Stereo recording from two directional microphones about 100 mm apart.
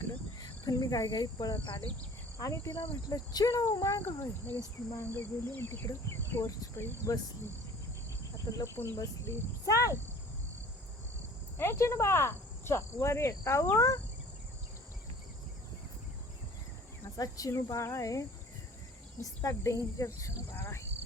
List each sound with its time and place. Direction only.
0.3 s speech: 40° left (ahead or behind)
2.4 s speech: 30° left (ahead or behind)
8.4 s speech: 35° left (ahead or behind)
11.5 s speech: 25° left (ahead or behind)
17.2 s speech: 35° left (ahead or behind)